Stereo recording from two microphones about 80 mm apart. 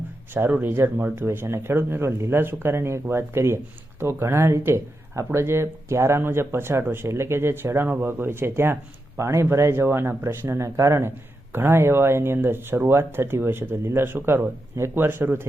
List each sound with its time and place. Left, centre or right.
0.3 s speech: right